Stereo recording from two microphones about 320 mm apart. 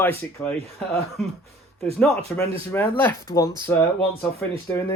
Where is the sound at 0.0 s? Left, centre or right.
Centre.